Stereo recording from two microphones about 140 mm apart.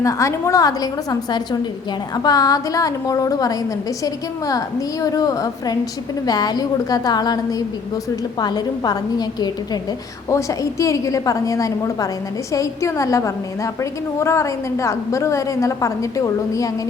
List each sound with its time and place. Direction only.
0.0 s a woman's voice: 20° left (ahead or behind)
8.4 s a woman's voice: 30° left (ahead or behind)